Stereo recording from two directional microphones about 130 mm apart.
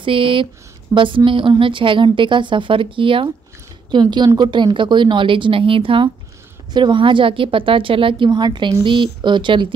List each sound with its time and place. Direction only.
0.0 s a woman's voice: 40° right (ahead or behind)